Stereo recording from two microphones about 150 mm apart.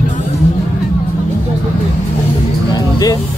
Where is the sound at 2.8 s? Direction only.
25° left (ahead or behind).